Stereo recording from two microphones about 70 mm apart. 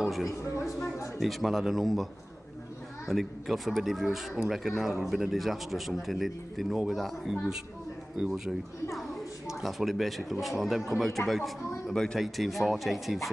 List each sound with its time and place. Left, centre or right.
0.0 s a sound: centre
0.9 s a man's voice: left
1.2 s a man's voice: centre
3.1 s a man's voice: centre
11.9 s a man's voice: centre